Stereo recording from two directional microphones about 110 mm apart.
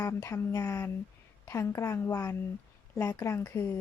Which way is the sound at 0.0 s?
25° left (ahead or behind).